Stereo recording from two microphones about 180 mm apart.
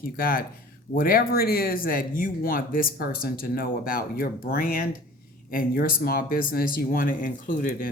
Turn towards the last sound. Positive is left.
turn(degrees=50)  # may be behind; listen again after turning